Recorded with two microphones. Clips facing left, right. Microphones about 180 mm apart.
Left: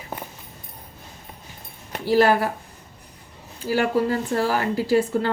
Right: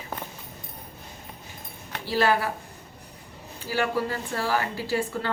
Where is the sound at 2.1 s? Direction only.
45° left (ahead or behind).